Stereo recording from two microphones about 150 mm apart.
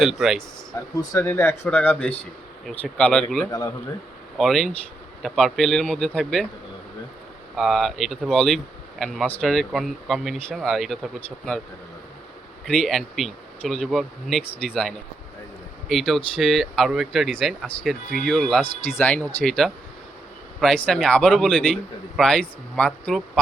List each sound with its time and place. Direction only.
0.0 s speech: 5° right (ahead or behind)
0.9 s speech: 20° left (ahead or behind)
3.5 s speech: 25° left (ahead or behind)
4.4 s speech: centre (ahead or behind)
7.5 s speech: centre (ahead or behind)
12.6 s speech: 5° left (ahead or behind)